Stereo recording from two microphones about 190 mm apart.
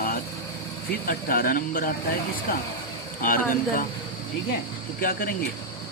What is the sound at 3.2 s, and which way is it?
Speech, 45° left (ahead or behind).